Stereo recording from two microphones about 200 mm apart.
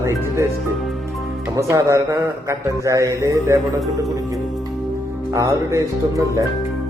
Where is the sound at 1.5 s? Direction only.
15° right (ahead or behind).